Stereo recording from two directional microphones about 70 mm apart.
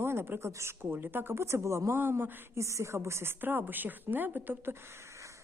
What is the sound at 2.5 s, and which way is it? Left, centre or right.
A woman's voice, right.